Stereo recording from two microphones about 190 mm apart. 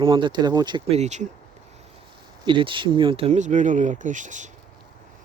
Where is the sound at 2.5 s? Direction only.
25° right (ahead or behind).